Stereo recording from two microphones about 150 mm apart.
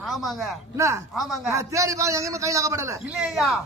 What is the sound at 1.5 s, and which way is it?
A man's voice, 20° right (ahead or behind).